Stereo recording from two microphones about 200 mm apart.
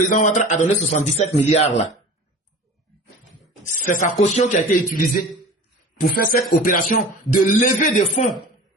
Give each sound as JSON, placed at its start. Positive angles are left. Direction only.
{"t": 0.0, "sound": "a man's voice", "side_deg": 40}
{"t": 3.7, "sound": "a man's voice", "side_deg": 40}